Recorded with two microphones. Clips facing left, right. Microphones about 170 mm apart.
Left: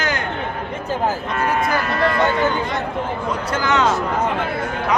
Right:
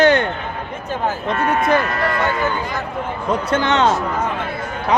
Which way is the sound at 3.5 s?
25° right (ahead or behind).